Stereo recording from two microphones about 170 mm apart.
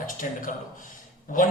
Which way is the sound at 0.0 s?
50° left (ahead or behind).